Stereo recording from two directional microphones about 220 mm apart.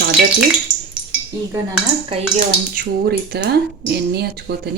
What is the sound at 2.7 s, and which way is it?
Speech, 45° right (ahead or behind).